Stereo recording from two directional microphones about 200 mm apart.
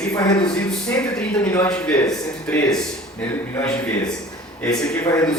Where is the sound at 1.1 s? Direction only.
10° left (ahead or behind).